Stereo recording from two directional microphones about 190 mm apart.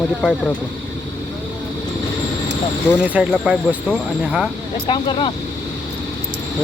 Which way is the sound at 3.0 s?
5° right (ahead or behind).